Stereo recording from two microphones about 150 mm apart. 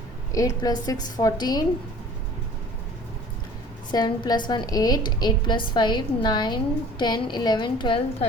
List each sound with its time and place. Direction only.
0.3 s a woman's voice: 25° left (ahead or behind)
3.9 s a woman's voice: 25° left (ahead or behind)